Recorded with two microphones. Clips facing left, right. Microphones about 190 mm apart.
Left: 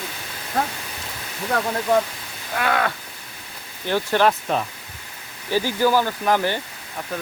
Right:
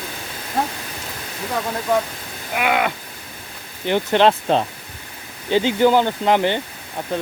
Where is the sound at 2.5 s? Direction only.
15° right (ahead or behind).